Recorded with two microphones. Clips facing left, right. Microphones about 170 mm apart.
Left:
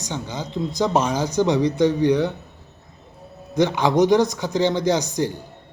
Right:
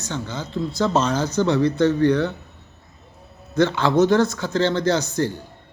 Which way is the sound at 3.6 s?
15° left (ahead or behind).